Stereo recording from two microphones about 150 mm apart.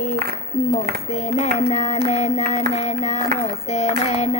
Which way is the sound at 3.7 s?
45° left (ahead or behind).